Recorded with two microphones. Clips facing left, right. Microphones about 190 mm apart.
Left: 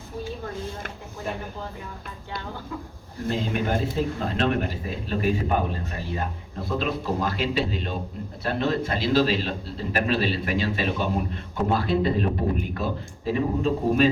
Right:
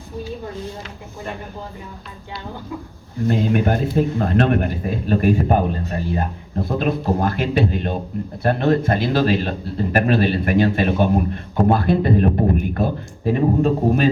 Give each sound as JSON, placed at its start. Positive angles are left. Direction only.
{"t": 3.2, "sound": "a man's voice", "side_deg": -55}